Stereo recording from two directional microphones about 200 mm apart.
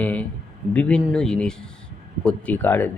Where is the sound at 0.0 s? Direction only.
5° left (ahead or behind).